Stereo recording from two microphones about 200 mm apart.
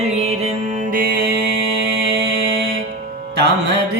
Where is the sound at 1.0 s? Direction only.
50° right (ahead or behind).